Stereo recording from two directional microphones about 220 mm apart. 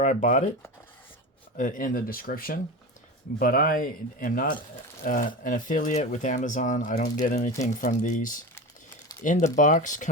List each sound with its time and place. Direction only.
0.0 s speech: 35° left (ahead or behind)
1.5 s speech: 35° left (ahead or behind)